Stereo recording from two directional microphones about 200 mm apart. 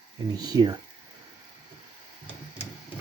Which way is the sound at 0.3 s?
20° right (ahead or behind).